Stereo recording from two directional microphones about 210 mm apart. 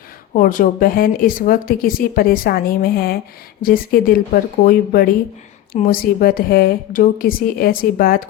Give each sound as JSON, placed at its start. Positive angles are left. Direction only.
{"t": 0.3, "sound": "speech", "side_deg": 40}